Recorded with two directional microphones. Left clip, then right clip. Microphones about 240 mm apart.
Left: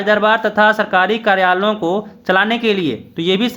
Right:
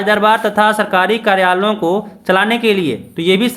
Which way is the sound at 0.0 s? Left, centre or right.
Centre.